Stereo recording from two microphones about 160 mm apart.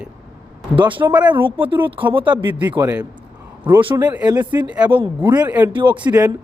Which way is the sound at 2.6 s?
15° right (ahead or behind).